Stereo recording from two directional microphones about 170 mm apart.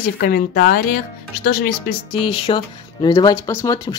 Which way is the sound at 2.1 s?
30° left (ahead or behind).